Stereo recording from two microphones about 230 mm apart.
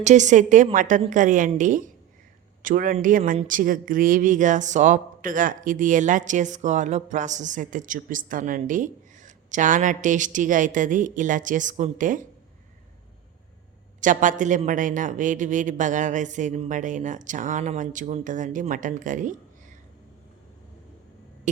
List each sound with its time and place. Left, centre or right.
0.0 s speech: right
14.0 s speech: right
21.5 s hum: right